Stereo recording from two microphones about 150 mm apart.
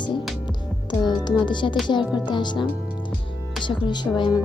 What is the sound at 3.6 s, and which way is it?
Speech, 30° left (ahead or behind).